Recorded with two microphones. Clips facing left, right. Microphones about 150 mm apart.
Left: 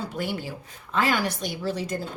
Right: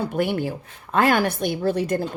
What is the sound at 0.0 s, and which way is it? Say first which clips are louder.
Speech: right 7 dB; 60° right (ahead or behind).